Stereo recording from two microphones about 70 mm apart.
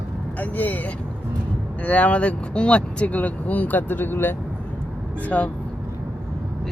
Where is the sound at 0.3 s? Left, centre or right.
Left.